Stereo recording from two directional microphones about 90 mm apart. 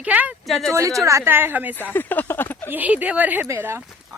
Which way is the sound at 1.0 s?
35° right (ahead or behind).